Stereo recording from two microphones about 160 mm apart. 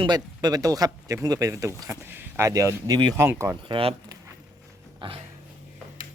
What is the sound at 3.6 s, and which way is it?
Speech, 35° right (ahead or behind).